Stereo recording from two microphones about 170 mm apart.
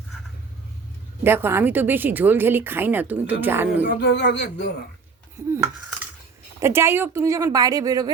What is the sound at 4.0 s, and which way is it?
Speech, 90° left.